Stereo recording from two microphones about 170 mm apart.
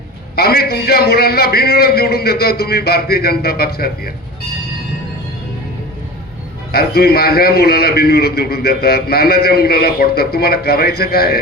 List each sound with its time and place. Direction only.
0.3 s a man's voice: 65° left (ahead or behind)
6.7 s a man's voice: 65° left (ahead or behind)